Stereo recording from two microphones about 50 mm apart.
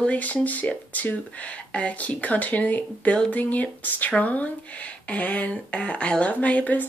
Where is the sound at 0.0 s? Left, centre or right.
Left.